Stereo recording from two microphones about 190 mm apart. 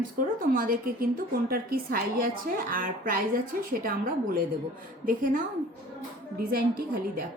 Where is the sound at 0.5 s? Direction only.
50° right (ahead or behind).